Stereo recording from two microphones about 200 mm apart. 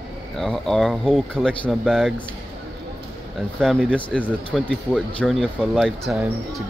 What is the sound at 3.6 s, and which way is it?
Speech, 5° left (ahead or behind).